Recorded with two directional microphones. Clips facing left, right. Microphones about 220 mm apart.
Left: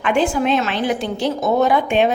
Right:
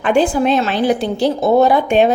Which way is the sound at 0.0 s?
35° right (ahead or behind).